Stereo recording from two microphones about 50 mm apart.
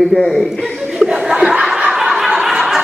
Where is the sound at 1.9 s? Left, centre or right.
Centre.